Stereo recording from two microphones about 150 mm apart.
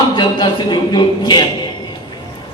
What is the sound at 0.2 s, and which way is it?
A man's voice, 30° left (ahead or behind).